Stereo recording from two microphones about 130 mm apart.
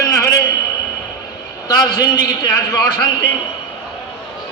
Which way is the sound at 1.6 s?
30° left (ahead or behind).